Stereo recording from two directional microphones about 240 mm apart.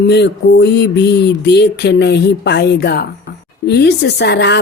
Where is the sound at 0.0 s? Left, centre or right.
Left.